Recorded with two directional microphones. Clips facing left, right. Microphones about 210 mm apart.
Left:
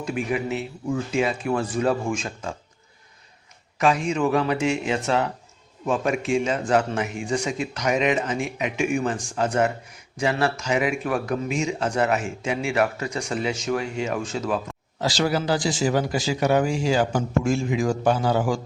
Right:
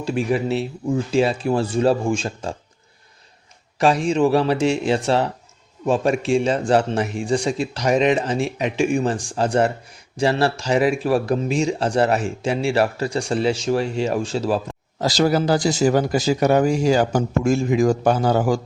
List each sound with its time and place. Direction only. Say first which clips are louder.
0.0 s speech: right 5 dB; 30° right (ahead or behind)
3.8 s speech: right 4 dB; 35° right (ahead or behind)